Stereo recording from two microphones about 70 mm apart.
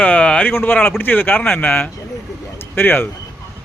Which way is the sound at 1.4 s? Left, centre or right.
Centre.